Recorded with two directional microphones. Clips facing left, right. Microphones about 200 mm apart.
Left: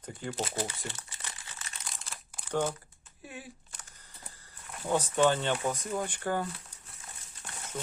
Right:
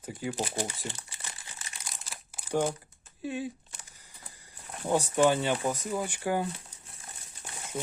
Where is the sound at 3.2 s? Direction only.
25° right (ahead or behind).